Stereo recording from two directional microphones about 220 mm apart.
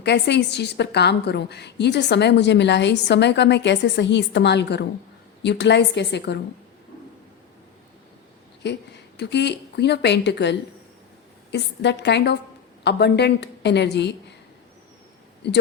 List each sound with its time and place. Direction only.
0.0 s a woman's voice: 50° left (ahead or behind)
8.6 s a woman's voice: 50° left (ahead or behind)
15.4 s a woman's voice: 50° left (ahead or behind)